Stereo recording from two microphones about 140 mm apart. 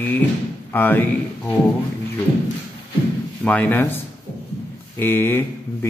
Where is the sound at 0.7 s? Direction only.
15° left (ahead or behind).